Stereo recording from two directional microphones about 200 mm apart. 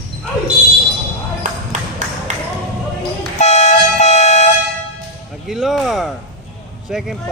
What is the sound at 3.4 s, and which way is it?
Vehicle, 35° left (ahead or behind).